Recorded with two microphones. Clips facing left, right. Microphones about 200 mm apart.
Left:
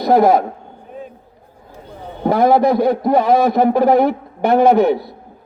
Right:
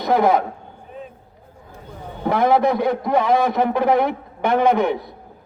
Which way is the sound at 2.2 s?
35° left (ahead or behind).